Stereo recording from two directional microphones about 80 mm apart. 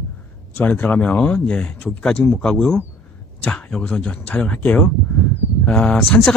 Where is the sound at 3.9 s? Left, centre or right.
Centre.